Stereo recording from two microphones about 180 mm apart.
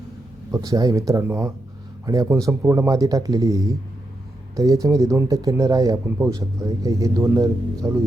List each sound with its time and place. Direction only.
0.5 s speech: 20° right (ahead or behind)